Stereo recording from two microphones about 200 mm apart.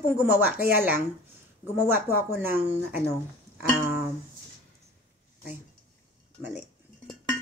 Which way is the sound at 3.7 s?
45° left (ahead or behind).